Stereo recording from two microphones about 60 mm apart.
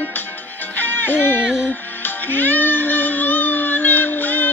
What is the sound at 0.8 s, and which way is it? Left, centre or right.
Music, left.